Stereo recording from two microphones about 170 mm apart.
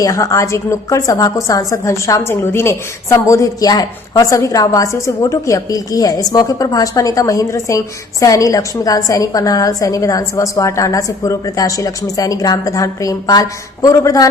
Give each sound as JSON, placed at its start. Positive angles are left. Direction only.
{"t": 0.0, "sound": "a woman's voice", "side_deg": 20}